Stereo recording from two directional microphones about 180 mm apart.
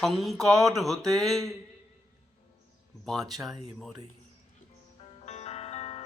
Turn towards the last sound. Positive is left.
turn(degrees=35)  # may be behind; listen again after turning